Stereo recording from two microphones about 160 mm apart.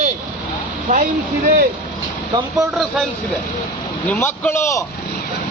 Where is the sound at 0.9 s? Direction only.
55° right (ahead or behind).